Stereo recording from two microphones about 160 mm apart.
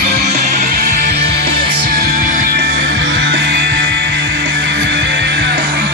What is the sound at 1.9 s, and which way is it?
Music, 65° right (ahead or behind).